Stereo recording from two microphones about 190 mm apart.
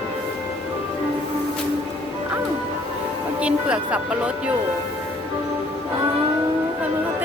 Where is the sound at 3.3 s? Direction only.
5° right (ahead or behind).